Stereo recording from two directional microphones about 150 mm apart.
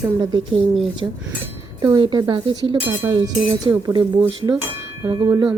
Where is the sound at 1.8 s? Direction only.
30° right (ahead or behind).